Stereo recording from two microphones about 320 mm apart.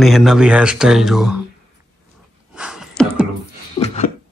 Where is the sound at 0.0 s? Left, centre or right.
Centre.